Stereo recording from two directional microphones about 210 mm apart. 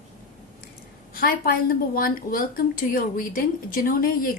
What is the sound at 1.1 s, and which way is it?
A woman's voice, 45° left (ahead or behind).